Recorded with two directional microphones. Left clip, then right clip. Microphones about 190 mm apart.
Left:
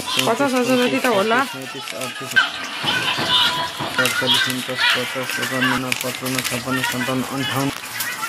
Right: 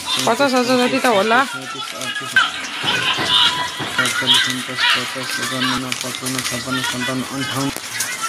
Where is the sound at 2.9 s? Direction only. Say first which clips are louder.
Right 2 dB; 25° left (ahead or behind).